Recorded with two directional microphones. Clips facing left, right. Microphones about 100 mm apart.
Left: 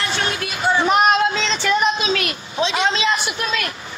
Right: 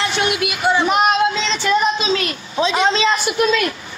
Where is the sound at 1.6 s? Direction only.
25° right (ahead or behind).